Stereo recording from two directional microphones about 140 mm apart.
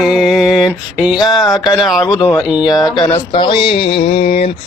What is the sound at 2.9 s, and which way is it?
Speech, 35° left (ahead or behind).